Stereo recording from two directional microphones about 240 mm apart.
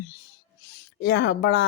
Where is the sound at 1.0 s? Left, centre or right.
Left.